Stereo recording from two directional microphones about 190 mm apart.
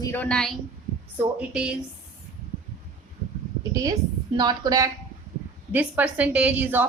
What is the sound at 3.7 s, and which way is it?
A woman's voice, 20° right (ahead or behind).